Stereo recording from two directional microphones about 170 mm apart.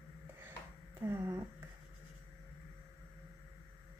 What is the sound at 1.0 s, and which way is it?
Speech, 15° right (ahead or behind).